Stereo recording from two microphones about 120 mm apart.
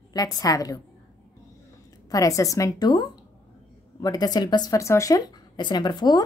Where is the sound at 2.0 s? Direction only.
30° left (ahead or behind).